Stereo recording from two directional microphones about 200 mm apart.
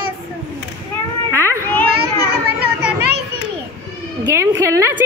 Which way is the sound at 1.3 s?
15° right (ahead or behind).